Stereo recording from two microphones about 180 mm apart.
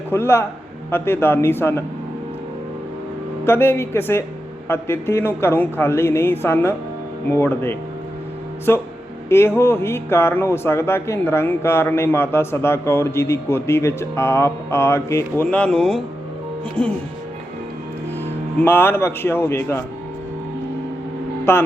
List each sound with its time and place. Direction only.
0.1 s speech: 15° left (ahead or behind)
3.4 s speech: 10° left (ahead or behind)
18.6 s speech: 10° left (ahead or behind)
21.5 s speech: 15° left (ahead or behind)